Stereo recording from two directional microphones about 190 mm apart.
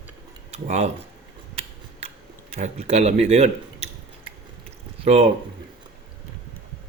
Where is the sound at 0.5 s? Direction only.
35° right (ahead or behind).